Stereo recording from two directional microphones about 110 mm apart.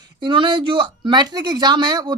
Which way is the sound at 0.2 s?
45° right (ahead or behind).